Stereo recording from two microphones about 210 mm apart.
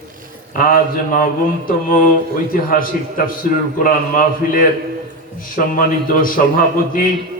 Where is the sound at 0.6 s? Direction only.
45° left (ahead or behind).